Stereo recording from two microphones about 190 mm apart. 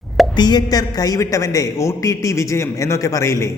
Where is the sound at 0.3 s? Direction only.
20° left (ahead or behind).